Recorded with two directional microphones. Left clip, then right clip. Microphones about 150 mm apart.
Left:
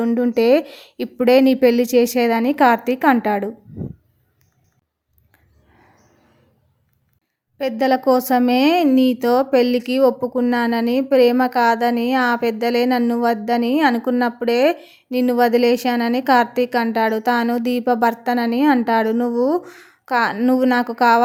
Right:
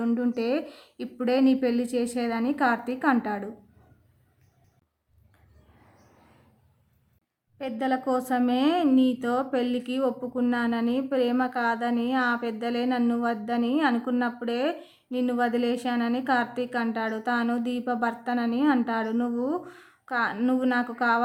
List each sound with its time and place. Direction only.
0.0 s speech: 30° left (ahead or behind)
7.6 s speech: 35° left (ahead or behind)